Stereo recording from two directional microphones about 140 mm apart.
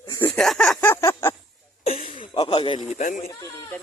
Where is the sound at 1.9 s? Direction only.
75° left (ahead or behind).